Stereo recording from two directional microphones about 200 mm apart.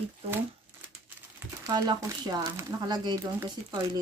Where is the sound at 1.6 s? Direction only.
20° right (ahead or behind).